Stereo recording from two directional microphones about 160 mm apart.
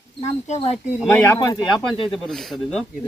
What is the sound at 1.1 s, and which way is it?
Speech, 15° left (ahead or behind).